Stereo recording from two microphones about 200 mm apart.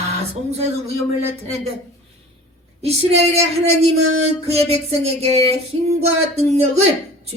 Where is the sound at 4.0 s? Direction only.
90° right.